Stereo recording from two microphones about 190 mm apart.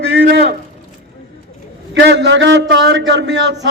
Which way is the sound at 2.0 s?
65° right (ahead or behind).